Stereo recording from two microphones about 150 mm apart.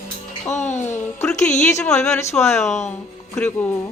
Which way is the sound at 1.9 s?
20° left (ahead or behind).